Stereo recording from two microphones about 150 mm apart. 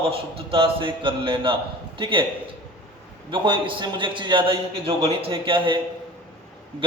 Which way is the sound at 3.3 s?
35° right (ahead or behind).